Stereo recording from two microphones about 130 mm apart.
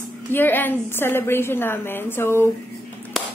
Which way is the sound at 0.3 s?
15° left (ahead or behind).